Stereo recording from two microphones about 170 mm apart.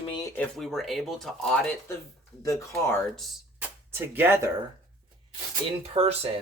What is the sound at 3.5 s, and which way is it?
Music, 10° right (ahead or behind).